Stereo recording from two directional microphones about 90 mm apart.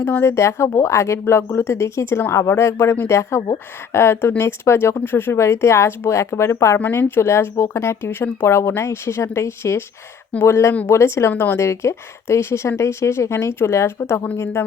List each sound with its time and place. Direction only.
0.0 s speech: 25° left (ahead or behind)
6.7 s speech: 20° left (ahead or behind)